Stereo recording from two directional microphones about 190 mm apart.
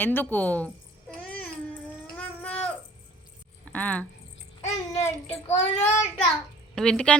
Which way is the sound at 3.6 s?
5° left (ahead or behind).